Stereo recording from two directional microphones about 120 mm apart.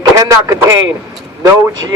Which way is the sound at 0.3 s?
25° right (ahead or behind).